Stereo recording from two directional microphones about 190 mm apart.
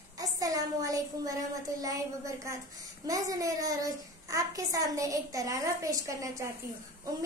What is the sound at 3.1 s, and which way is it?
Child singing, 20° right (ahead or behind).